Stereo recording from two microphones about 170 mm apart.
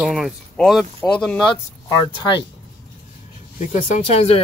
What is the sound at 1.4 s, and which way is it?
Speech, 25° left (ahead or behind).